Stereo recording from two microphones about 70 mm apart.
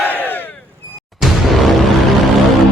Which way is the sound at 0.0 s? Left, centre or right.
Left.